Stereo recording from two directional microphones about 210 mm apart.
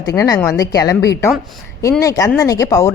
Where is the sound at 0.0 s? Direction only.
15° left (ahead or behind).